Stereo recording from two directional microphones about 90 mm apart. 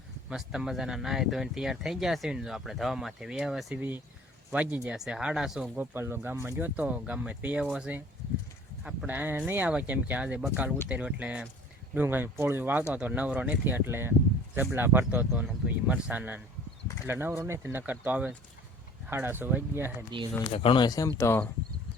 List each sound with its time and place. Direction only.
0.3 s speech: 5° right (ahead or behind)
3.8 s speech: 20° right (ahead or behind)
5.7 s speech: 25° right (ahead or behind); by 9.0 s 5° right (ahead or behind)
9.0 s speech: 20° right (ahead or behind)
11.9 s speech: 25° right (ahead or behind)
20.1 s speech: 55° right (ahead or behind)
20.5 s speech: 90° left
20.8 s speech: 40° left (ahead or behind)
21.2 s speech: 30° left (ahead or behind)